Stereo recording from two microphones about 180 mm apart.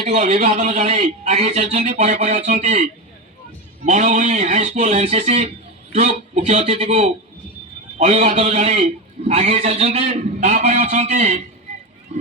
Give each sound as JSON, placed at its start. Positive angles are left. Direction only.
{"t": 0.0, "sound": "a man's voice", "side_deg": -40}